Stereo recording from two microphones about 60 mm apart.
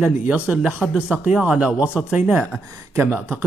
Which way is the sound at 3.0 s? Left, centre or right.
Right.